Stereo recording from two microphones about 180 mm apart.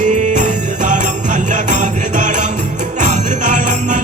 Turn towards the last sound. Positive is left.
turn(degrees=-45)  # may be behind; listen again after turning